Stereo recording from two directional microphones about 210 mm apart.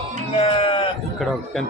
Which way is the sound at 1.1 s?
Centre (ahead or behind).